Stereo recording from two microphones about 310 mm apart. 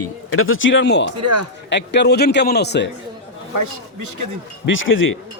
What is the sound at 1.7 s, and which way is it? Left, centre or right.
A man's voice, left.